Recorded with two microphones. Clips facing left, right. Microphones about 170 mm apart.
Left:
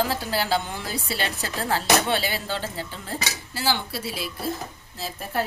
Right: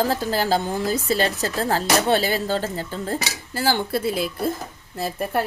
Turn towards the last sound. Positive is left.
turn(degrees=-55)  # may be behind; listen again after turning